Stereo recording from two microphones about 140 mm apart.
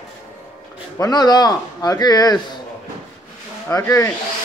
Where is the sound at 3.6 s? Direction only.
20° left (ahead or behind).